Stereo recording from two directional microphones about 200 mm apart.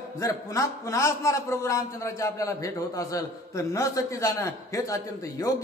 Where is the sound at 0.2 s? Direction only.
15° left (ahead or behind).